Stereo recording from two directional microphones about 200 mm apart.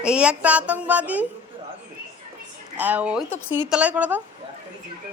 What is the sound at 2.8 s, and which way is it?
A woman's voice, 5° right (ahead or behind).